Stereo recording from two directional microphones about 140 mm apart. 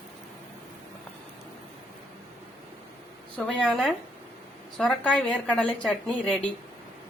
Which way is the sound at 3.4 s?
5° left (ahead or behind).